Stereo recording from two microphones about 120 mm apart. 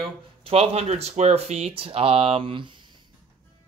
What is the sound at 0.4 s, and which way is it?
Speech, 55° right (ahead or behind).